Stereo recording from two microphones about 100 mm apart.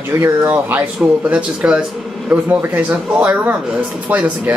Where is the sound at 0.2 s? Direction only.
25° right (ahead or behind).